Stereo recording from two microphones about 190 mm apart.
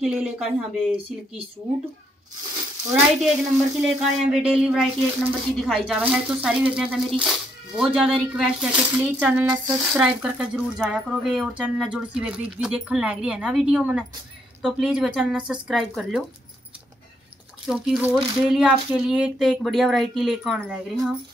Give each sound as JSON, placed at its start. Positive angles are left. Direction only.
{"t": 0.0, "sound": "speech", "side_deg": -5}
{"t": 2.9, "sound": "speech", "side_deg": -5}
{"t": 17.6, "sound": "speech", "side_deg": -5}